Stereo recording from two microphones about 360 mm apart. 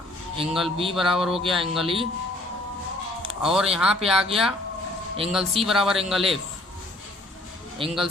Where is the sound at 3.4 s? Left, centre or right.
Centre.